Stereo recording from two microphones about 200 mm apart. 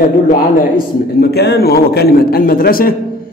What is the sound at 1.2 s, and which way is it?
A man's voice, 55° left (ahead or behind).